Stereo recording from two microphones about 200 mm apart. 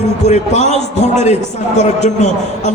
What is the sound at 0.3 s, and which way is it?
A man's voice, 35° left (ahead or behind).